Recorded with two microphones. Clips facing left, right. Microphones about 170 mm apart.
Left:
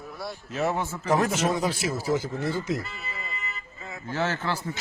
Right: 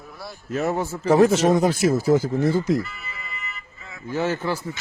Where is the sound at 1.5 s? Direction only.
45° right (ahead or behind).